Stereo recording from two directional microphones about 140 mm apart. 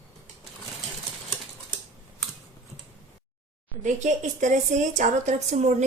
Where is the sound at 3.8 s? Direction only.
60° right (ahead or behind).